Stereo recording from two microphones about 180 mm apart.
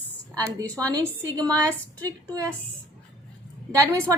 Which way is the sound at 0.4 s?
20° right (ahead or behind).